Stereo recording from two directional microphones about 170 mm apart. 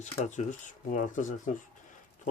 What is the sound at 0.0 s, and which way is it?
Speech, 45° left (ahead or behind).